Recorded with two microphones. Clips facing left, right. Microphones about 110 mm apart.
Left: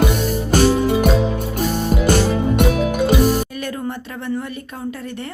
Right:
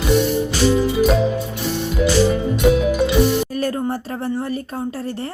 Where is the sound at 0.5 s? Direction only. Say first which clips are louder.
Left 4 dB; 50° left (ahead or behind).